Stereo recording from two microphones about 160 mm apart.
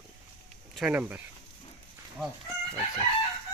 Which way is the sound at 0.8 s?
10° right (ahead or behind).